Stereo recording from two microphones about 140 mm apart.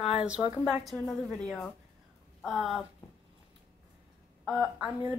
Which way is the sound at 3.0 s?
20° left (ahead or behind).